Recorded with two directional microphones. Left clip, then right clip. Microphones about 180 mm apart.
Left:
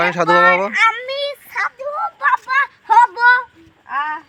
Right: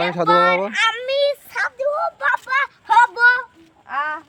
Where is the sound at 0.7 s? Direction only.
45° right (ahead or behind).